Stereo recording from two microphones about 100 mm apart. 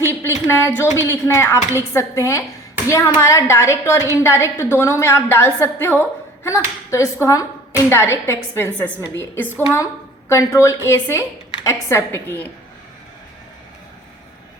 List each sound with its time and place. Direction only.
0.1 s a woman's voice: 25° left (ahead or behind)